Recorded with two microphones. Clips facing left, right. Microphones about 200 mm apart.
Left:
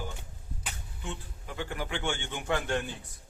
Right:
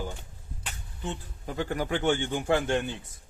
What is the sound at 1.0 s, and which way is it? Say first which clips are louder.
Speech: right 5 dB; 40° right (ahead or behind).